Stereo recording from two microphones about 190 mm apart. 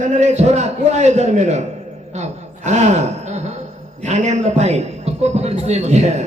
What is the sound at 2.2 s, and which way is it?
Chuckle, 40° right (ahead or behind).